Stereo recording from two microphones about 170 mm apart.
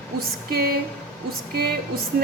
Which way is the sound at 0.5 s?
60° right (ahead or behind).